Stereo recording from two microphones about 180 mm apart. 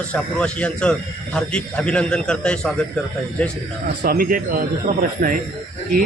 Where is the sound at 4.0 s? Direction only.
55° right (ahead or behind).